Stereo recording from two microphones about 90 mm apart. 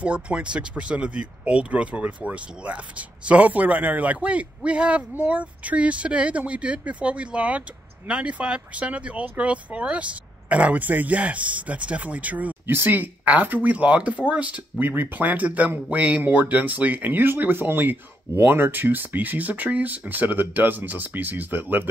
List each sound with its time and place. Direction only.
0.0 s a man's voice: 15° right (ahead or behind)